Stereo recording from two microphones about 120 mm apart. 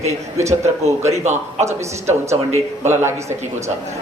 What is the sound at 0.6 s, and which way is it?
Speech, 70° right (ahead or behind).